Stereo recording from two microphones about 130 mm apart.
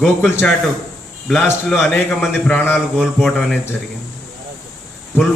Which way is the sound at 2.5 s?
15° left (ahead or behind).